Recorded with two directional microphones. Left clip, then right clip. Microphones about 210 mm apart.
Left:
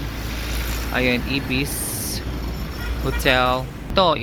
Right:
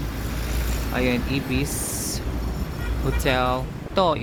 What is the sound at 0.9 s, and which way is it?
Speech, 5° right (ahead or behind).